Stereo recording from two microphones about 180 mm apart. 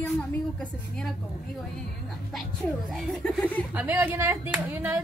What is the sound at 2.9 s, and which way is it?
Speech, 5° left (ahead or behind).